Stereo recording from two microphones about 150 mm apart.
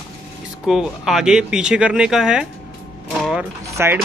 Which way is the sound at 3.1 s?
Centre (ahead or behind).